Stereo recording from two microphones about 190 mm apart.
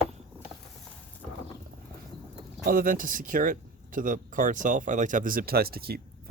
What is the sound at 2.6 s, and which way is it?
Speech, 45° right (ahead or behind).